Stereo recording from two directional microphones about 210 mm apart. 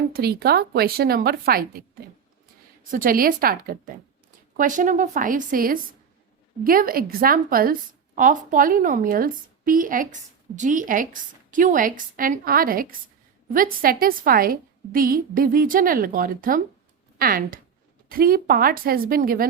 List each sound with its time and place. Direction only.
0.1 s a woman's voice: 50° right (ahead or behind)
2.9 s a woman's voice: 40° right (ahead or behind)